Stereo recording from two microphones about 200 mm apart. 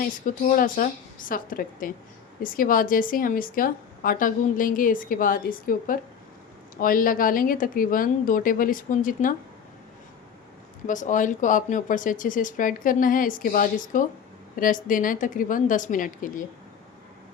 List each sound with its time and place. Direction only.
0.0 s a woman's voice: 45° left (ahead or behind)
10.8 s speech: 40° left (ahead or behind)